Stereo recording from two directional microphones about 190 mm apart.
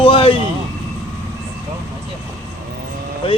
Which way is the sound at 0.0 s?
30° left (ahead or behind).